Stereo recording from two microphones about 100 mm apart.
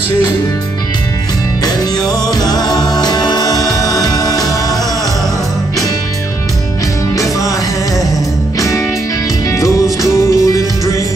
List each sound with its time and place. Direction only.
1.6 s music: 40° left (ahead or behind)
8.5 s music: 35° left (ahead or behind)